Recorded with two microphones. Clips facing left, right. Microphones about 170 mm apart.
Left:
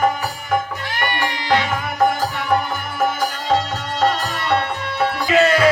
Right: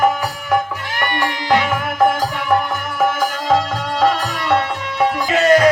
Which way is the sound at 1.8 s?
90° right.